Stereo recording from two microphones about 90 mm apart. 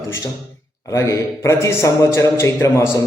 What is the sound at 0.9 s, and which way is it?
A man's voice, 35° left (ahead or behind).